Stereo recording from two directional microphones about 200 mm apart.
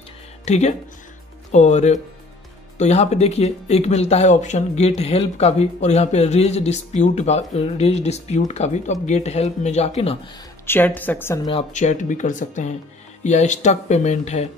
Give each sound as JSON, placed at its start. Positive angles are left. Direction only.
{"t": 0.5, "sound": "speech", "side_deg": 35}
{"t": 10.7, "sound": "a woman's voice", "side_deg": 10}
{"t": 11.7, "sound": "speech", "side_deg": 35}